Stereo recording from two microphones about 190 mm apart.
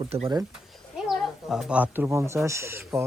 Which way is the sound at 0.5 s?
Centre (ahead or behind).